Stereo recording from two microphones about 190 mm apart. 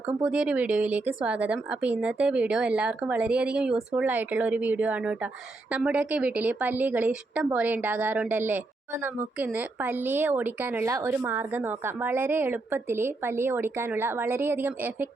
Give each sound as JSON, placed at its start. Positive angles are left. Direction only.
{"t": 0.2, "sound": "a woman's voice", "side_deg": -5}